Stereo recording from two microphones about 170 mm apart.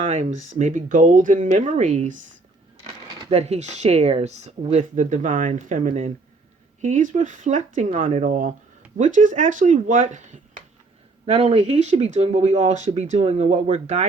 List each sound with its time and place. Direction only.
0.0 s speech: 45° right (ahead or behind)
3.1 s a sound: 25° right (ahead or behind)
3.3 s speech: 40° right (ahead or behind)